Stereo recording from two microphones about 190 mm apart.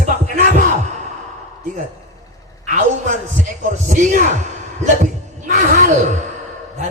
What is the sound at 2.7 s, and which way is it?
A man's voice, 40° right (ahead or behind).